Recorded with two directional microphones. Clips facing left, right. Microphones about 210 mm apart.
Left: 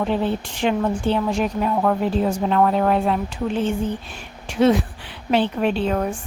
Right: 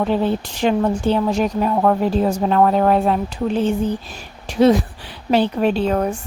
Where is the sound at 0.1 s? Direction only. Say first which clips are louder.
Right 3 dB; 40° right (ahead or behind).